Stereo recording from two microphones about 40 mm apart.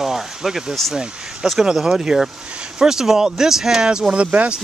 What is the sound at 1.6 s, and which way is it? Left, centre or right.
Speech, centre.